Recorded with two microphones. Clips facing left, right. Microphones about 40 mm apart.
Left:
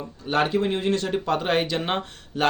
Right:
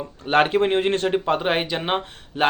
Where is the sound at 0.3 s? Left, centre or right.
Right.